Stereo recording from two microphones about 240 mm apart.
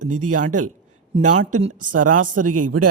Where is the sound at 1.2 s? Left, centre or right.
Right.